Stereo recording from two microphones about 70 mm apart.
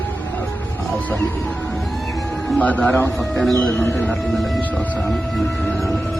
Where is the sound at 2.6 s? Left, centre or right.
Left.